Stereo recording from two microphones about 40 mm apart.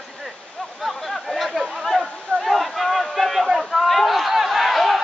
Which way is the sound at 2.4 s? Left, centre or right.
Centre.